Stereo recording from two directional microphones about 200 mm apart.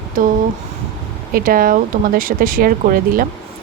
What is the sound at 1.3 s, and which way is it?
Speech, 45° right (ahead or behind).